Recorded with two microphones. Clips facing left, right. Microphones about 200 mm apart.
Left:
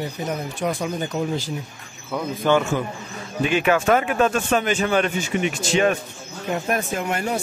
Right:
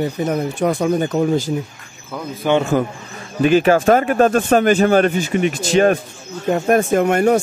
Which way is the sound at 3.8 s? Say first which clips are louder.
Right 5 dB; 45° right (ahead or behind).